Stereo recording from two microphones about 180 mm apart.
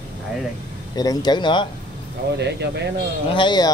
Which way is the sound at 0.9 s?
20° left (ahead or behind).